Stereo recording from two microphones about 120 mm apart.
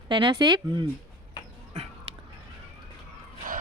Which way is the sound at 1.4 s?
35° left (ahead or behind).